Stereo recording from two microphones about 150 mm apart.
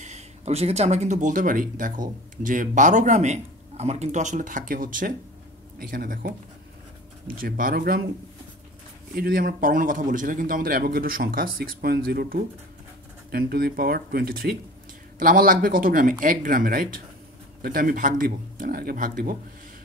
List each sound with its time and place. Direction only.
0.0 s a man's voice: 45° right (ahead or behind); by 8.0 s 80° right
9.1 s a man's voice: 75° right (ahead or behind)
15.1 s a man's voice: 70° right (ahead or behind)